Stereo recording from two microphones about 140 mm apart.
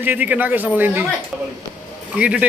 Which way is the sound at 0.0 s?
10° right (ahead or behind).